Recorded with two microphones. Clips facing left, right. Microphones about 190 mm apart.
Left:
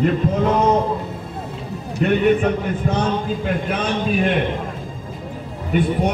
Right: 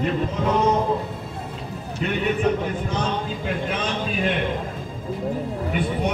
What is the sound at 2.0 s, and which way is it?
Speech, 50° left (ahead or behind).